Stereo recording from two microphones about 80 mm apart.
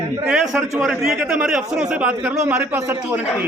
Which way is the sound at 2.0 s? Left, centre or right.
Centre.